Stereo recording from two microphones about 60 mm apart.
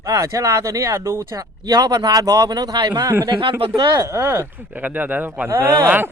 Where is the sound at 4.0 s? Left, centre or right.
Right.